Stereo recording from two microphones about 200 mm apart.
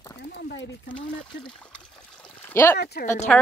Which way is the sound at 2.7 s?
50° left (ahead or behind).